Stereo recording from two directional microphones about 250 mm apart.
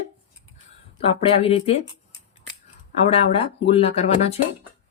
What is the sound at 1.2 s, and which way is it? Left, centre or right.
Speech, left.